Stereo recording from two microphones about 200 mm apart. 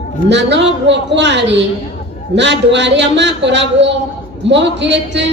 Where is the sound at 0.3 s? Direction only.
60° right (ahead or behind).